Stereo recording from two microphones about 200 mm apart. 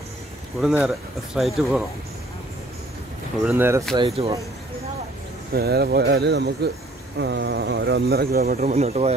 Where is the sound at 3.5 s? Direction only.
10° right (ahead or behind).